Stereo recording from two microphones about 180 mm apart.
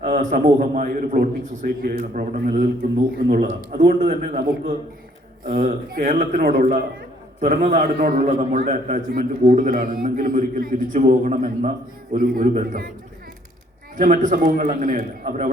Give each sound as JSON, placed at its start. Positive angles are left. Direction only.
{"t": 0.1, "sound": "a man's voice", "side_deg": -50}
{"t": 7.6, "sound": "a man's voice", "side_deg": -40}
{"t": 7.9, "sound": "a man's voice", "side_deg": -50}
{"t": 8.3, "sound": "a man's voice", "side_deg": -35}
{"t": 8.7, "sound": "a man's voice", "side_deg": -45}
{"t": 13.9, "sound": "a man's voice", "side_deg": -45}